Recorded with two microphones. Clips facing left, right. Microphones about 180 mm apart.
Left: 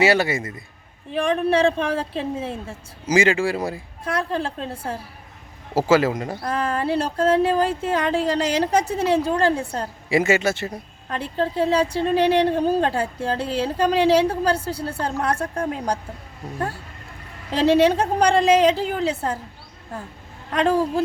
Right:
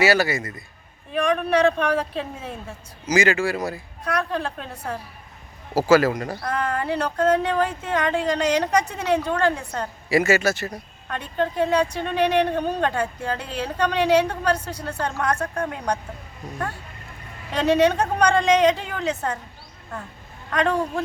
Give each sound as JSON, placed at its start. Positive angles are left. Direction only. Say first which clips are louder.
{"t": 0.0, "sound": "a woman's voice", "louder": "left 1 dB", "side_deg": 25}
{"t": 10.2, "sound": "speech", "louder": "even", "side_deg": 20}
{"t": 17.5, "sound": "speech", "louder": "left 2 dB", "side_deg": 30}
{"t": 20.5, "sound": "a woman's voice", "louder": "left 2 dB", "side_deg": 30}